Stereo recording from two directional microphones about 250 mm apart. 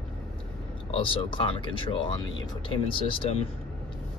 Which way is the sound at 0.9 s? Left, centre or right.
Left.